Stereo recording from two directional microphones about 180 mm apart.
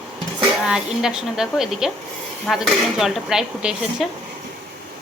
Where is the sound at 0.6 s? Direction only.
5° right (ahead or behind).